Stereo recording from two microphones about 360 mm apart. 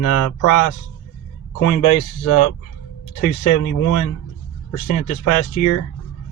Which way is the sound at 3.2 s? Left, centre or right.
Left.